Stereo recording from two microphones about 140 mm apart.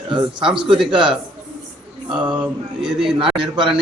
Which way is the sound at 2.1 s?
10° right (ahead or behind).